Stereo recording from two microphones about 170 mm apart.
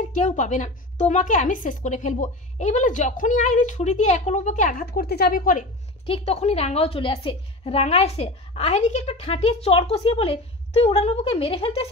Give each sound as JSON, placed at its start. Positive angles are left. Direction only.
{"t": 0.1, "sound": "a woman's voice", "side_deg": 45}
{"t": 6.0, "sound": "a woman's voice", "side_deg": 35}